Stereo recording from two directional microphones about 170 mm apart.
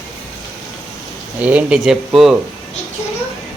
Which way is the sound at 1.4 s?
10° right (ahead or behind).